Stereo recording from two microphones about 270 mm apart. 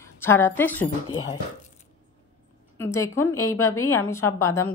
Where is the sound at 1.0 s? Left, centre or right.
Left.